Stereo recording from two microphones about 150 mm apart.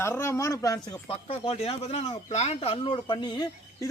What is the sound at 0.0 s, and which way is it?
Speech, 15° left (ahead or behind).